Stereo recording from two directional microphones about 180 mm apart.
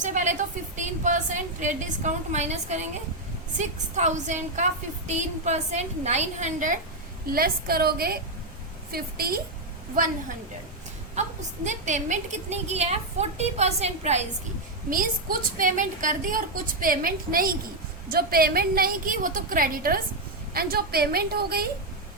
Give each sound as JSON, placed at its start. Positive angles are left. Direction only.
{"t": 0.0, "sound": "a sound", "side_deg": -45}
{"t": 1.6, "sound": "a woman's voice", "side_deg": -45}
{"t": 7.3, "sound": "a woman's voice", "side_deg": -55}
{"t": 11.1, "sound": "a woman's voice", "side_deg": -40}
{"t": 14.8, "sound": "a woman's voice", "side_deg": -50}